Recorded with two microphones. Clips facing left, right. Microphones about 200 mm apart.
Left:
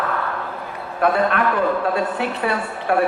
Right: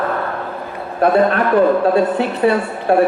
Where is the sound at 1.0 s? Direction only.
35° right (ahead or behind).